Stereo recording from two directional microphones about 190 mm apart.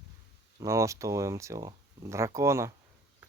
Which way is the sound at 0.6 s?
15° right (ahead or behind).